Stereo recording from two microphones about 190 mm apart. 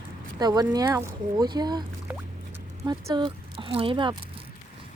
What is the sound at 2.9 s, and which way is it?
Speech, 20° right (ahead or behind).